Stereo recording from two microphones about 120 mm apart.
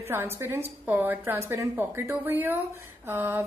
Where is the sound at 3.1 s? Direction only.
20° right (ahead or behind).